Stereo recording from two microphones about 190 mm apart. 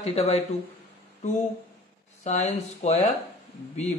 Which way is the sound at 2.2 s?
35° left (ahead or behind).